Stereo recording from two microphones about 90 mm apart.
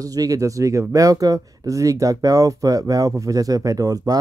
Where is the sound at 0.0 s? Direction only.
40° right (ahead or behind).